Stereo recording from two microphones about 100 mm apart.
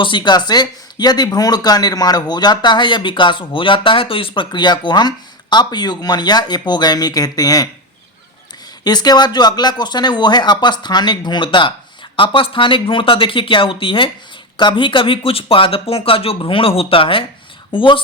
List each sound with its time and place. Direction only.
0.0 s speech: 50° left (ahead or behind)
8.8 s speech: 45° left (ahead or behind); by 18.0 s 60° left (ahead or behind)